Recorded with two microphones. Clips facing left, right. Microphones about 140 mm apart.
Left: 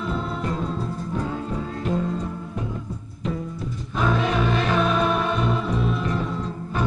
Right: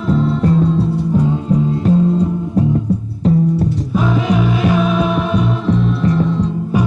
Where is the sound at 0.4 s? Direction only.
35° right (ahead or behind).